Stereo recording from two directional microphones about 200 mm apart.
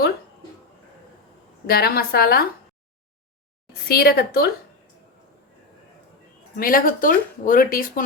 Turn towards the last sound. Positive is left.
turn(degrees=45)  # may be behind; listen again after turning